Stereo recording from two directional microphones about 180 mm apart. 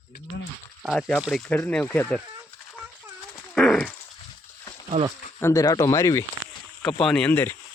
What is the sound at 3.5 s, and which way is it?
Dog, 5° left (ahead or behind).